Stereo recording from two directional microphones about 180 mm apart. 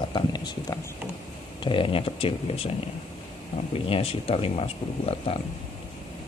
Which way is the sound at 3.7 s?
30° left (ahead or behind).